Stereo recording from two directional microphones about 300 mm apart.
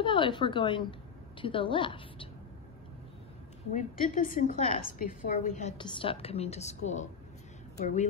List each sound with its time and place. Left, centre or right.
0.0 s a woman's voice: centre
3.7 s a woman's voice: left